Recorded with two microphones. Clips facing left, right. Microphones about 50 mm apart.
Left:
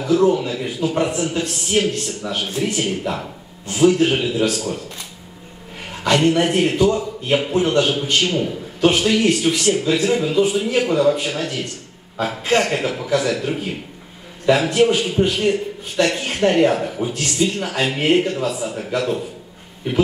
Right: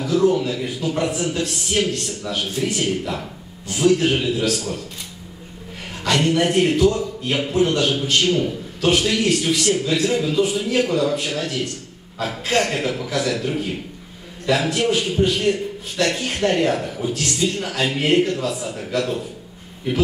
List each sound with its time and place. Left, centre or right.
0.0 s a man's voice: centre
6.0 s a man's voice: centre